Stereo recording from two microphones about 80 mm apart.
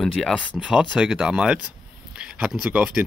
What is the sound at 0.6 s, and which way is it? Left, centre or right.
Speech, centre.